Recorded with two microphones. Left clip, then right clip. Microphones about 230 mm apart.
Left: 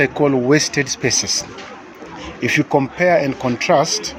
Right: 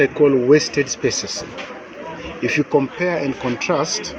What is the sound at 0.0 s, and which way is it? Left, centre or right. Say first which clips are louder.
Speech: right 1 dB; left.